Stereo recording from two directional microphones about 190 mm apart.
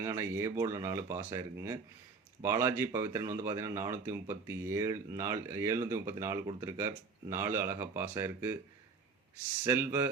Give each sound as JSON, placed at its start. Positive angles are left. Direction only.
{"t": 0.0, "sound": "speech", "side_deg": -15}
{"t": 9.6, "sound": "speech", "side_deg": -10}